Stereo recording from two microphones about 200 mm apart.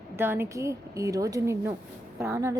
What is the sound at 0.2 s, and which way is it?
A woman's voice, 10° right (ahead or behind).